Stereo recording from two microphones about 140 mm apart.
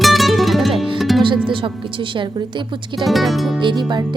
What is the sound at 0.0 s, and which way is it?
Music, centre (ahead or behind).